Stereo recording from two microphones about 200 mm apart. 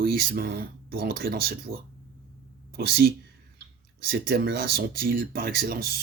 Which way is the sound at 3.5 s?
50° right (ahead or behind).